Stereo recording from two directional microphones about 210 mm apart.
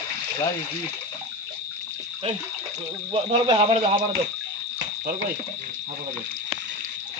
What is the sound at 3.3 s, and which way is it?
Speech, 25° right (ahead or behind).